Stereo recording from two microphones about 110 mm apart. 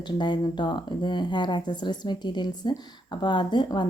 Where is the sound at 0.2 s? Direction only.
45° left (ahead or behind).